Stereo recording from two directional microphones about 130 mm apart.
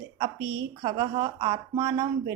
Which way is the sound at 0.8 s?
40° right (ahead or behind).